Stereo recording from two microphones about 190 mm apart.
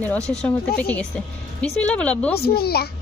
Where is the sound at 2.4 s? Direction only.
55° left (ahead or behind).